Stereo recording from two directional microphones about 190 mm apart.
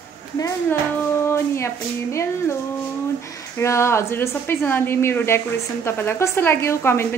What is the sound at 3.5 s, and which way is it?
A woman's voice, 15° left (ahead or behind).